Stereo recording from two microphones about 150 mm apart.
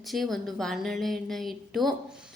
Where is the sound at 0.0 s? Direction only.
Centre (ahead or behind).